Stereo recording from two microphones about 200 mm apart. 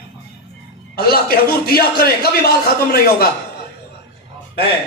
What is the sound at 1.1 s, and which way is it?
A man's voice, 50° left (ahead or behind).